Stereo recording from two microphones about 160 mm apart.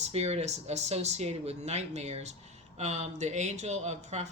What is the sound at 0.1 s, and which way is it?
Speech, 40° right (ahead or behind).